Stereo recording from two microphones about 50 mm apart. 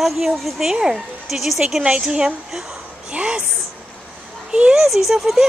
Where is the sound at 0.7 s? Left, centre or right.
Centre.